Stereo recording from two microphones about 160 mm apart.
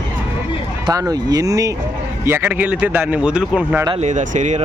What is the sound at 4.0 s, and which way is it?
Speech, 50° right (ahead or behind).